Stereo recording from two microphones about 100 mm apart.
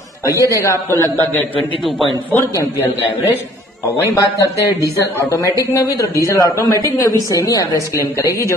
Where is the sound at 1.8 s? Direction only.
Centre (ahead or behind).